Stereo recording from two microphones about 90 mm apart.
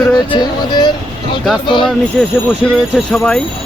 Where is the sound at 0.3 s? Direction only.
55° left (ahead or behind).